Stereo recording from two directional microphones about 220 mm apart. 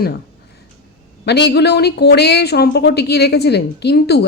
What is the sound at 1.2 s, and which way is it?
A woman's voice, 50° left (ahead or behind).